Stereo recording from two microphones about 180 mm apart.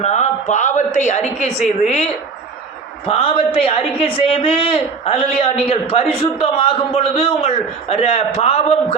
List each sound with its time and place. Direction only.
0.0 s a woman's voice: 40° left (ahead or behind)
3.1 s a woman's voice: 30° left (ahead or behind)